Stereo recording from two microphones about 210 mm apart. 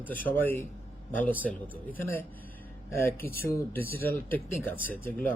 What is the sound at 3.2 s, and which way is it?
Speech, 45° left (ahead or behind).